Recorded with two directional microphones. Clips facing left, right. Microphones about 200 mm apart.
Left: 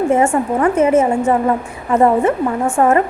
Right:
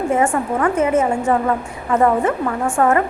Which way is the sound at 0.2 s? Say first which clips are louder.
Left 3 dB; 25° left (ahead or behind).